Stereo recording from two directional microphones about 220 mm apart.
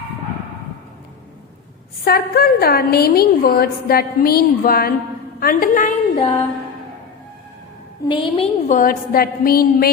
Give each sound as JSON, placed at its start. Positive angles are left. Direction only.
{"t": 2.0, "sound": "a woman's voice", "side_deg": 45}
{"t": 8.0, "sound": "a woman's voice", "side_deg": 25}